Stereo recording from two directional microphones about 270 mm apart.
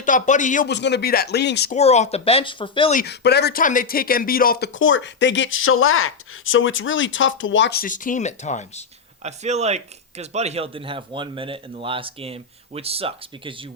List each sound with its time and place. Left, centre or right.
0.0 s speech: left
1.7 s speech: left
3.0 s speech: left
9.2 s speech: right